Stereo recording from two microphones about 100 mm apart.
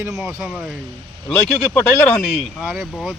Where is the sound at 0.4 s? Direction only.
5° right (ahead or behind).